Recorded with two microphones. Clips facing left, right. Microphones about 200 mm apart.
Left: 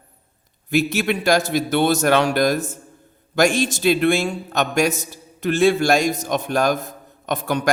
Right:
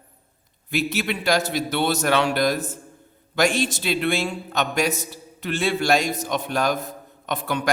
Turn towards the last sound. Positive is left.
turn(degrees=45)  # may be behind; listen again after turning